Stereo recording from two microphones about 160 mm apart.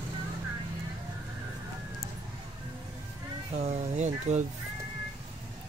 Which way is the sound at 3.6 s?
45° right (ahead or behind).